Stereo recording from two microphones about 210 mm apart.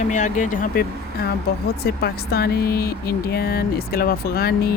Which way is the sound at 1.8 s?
50° left (ahead or behind).